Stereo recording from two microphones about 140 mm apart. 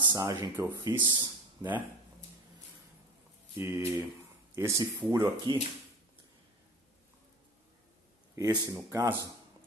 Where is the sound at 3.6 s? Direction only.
20° right (ahead or behind).